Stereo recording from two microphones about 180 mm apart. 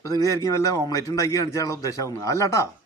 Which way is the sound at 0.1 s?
20° left (ahead or behind).